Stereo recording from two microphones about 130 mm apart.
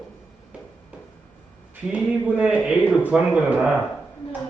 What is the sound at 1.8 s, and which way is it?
Speech, 10° right (ahead or behind).